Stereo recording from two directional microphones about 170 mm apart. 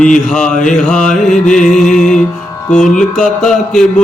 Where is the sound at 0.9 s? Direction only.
45° left (ahead or behind).